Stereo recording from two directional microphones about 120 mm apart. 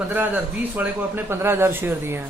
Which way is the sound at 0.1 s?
15° right (ahead or behind).